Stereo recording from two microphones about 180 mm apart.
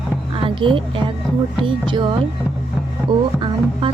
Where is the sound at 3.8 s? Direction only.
25° right (ahead or behind).